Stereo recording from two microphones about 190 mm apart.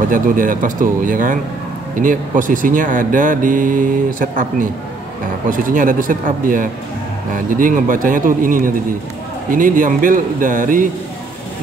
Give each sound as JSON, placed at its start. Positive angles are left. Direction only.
{"t": 0.1, "sound": "speech", "side_deg": -45}